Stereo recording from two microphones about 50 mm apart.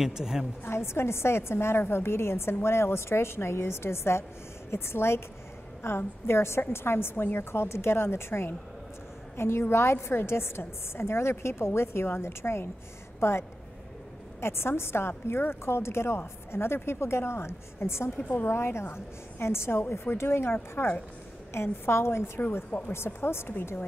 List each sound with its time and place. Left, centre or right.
0.0 s a woman's voice: centre
0.7 s a woman's voice: left
21.5 s a woman's voice: left
22.7 s speech: left
22.9 s a woman's voice: left